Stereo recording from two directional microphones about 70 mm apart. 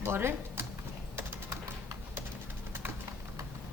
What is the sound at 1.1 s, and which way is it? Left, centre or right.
Typing, right.